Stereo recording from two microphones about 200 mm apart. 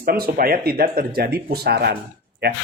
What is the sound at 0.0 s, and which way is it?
Speech, 50° right (ahead or behind).